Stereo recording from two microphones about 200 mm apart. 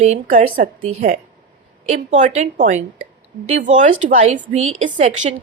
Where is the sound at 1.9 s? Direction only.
35° right (ahead or behind).